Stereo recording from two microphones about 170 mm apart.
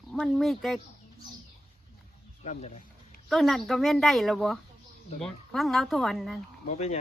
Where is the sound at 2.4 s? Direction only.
40° left (ahead or behind).